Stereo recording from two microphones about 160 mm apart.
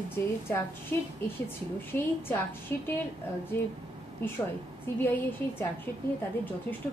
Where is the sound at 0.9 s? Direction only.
10° left (ahead or behind).